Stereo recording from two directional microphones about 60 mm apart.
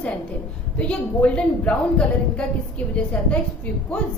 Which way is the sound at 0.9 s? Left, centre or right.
Centre.